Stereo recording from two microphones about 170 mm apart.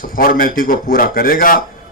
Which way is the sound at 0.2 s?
55° left (ahead or behind).